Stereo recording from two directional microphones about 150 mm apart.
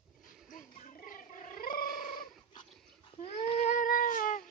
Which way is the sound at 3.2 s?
45° left (ahead or behind).